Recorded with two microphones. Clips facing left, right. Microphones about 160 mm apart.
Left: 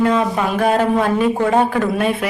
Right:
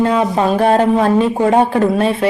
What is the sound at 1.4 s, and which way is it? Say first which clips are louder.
Speech: right 3 dB; 20° right (ahead or behind).